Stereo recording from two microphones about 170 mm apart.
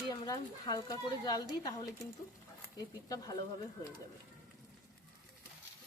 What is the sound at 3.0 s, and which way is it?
Speech, 20° left (ahead or behind).